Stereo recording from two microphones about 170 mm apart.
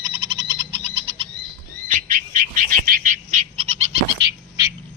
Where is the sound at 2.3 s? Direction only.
55° right (ahead or behind).